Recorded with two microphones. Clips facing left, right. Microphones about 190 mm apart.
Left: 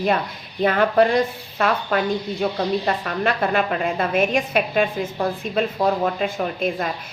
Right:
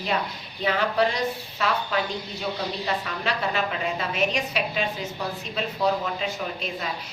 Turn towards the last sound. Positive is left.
turn(degrees=55)  # may be behind; listen again after turning